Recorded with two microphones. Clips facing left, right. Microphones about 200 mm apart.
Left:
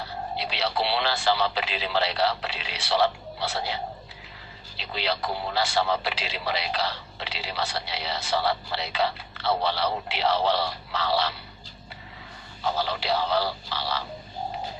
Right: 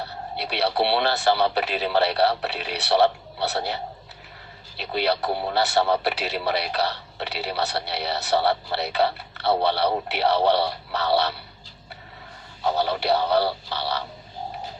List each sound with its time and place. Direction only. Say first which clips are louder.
0.8 s speech: right 4 dB; 55° right (ahead or behind)
4.8 s speech: right 6 dB; 60° right (ahead or behind)
12.6 s speech: right 5 dB; 60° right (ahead or behind)